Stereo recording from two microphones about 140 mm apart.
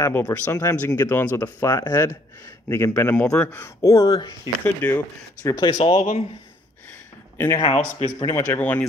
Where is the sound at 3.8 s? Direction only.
25° left (ahead or behind).